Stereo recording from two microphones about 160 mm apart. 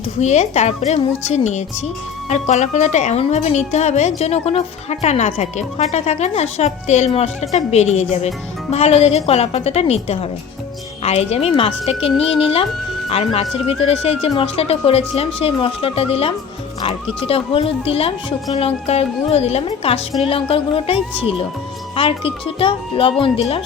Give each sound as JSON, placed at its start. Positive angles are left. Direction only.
{"t": 0.2, "sound": "a woman's voice", "side_deg": 45}